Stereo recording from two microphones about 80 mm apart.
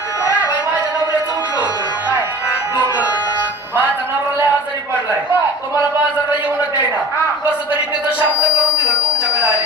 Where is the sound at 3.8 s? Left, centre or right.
Right.